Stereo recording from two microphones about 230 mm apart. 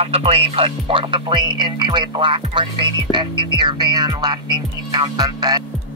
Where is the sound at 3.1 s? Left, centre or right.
Centre.